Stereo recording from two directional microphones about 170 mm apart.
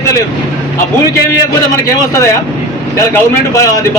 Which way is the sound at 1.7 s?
20° left (ahead or behind).